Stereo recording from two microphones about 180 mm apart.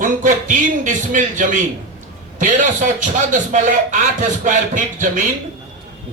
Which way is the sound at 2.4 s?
45° right (ahead or behind).